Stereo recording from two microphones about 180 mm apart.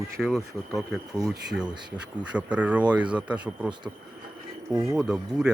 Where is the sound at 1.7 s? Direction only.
25° right (ahead or behind).